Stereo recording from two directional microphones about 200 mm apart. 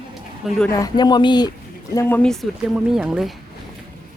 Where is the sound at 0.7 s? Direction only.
20° left (ahead or behind).